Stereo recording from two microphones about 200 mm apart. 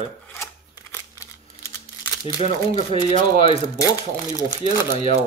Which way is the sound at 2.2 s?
30° left (ahead or behind).